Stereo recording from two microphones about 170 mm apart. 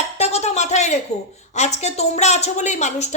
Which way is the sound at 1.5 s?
40° left (ahead or behind).